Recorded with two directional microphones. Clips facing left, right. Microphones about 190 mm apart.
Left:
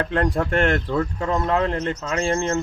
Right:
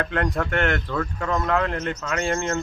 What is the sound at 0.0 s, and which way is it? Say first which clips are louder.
A man's voice: left 3 dB; 30° left (ahead or behind).